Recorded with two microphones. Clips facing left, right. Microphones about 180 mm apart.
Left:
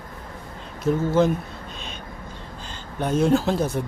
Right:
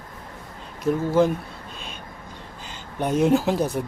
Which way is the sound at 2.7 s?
15° right (ahead or behind).